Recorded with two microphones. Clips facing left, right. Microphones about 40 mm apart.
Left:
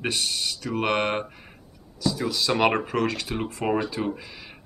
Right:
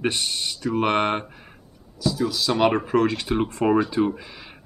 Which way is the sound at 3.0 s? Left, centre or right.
Centre.